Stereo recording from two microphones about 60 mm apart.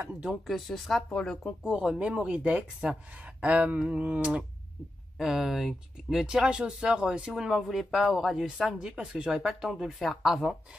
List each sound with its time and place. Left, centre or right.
0.5 s a woman's voice: centre
1.6 s speech: centre
5.2 s a woman's voice: centre